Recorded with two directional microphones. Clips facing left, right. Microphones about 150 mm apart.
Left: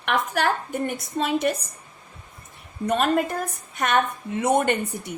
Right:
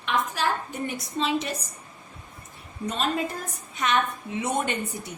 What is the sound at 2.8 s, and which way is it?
A woman's voice, 55° left (ahead or behind).